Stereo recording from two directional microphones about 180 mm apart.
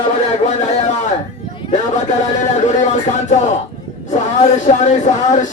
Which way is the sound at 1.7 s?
40° left (ahead or behind).